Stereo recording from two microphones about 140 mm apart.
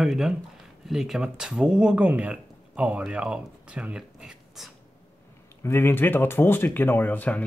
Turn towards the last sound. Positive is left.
turn(degrees=10)  # may be behind; listen again after turning